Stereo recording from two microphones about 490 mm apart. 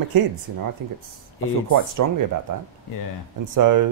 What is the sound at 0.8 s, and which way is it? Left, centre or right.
Speech, right.